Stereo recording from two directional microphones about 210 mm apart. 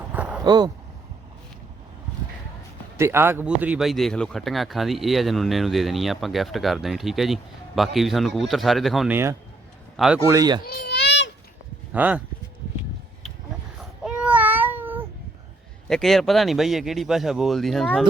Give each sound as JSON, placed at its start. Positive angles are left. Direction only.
{"t": 0.1, "sound": "vehicle", "side_deg": -5}
{"t": 0.4, "sound": "speech", "side_deg": -20}
{"t": 3.0, "sound": "a man's voice", "side_deg": -10}
{"t": 10.2, "sound": "speech", "side_deg": -15}
{"t": 10.6, "sound": "baby cry", "side_deg": 50}
{"t": 11.9, "sound": "speech", "side_deg": -5}
{"t": 14.0, "sound": "a sound", "side_deg": -5}
{"t": 15.9, "sound": "a man's voice", "side_deg": 0}